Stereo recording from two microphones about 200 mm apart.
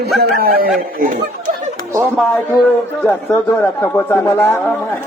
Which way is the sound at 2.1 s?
Centre (ahead or behind).